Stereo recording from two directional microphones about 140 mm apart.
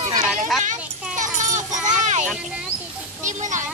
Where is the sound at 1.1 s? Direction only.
60° right (ahead or behind).